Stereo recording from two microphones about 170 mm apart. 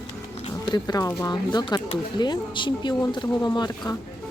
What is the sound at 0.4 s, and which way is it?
Speech, 25° left (ahead or behind).